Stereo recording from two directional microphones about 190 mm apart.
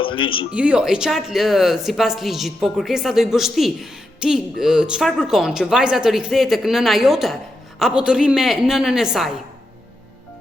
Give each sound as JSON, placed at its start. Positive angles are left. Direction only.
{"t": 0.0, "sound": "speech", "side_deg": 25}
{"t": 0.5, "sound": "speech", "side_deg": -5}